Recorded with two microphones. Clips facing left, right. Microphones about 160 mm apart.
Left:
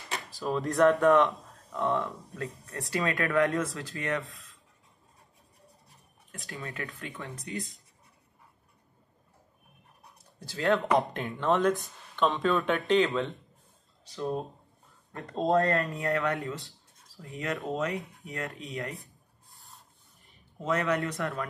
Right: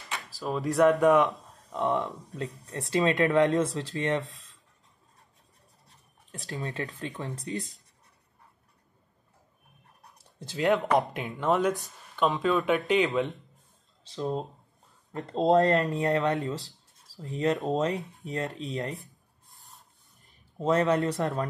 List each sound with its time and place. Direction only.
0.3 s speech: centre (ahead or behind)
0.8 s speech: 15° right (ahead or behind)
6.6 s speech: 30° right (ahead or behind)
10.4 s speech: 20° right (ahead or behind)
10.9 s speech: 5° right (ahead or behind)
13.1 s speech: 20° right (ahead or behind)
17.6 s speech: 30° right (ahead or behind)
20.5 s speech: 30° right (ahead or behind)